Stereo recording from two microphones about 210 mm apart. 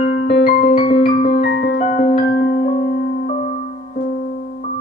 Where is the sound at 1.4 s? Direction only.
55° left (ahead or behind).